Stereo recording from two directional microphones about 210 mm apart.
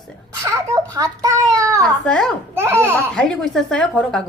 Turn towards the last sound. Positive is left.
turn(degrees=5)  # may be behind; listen again after turning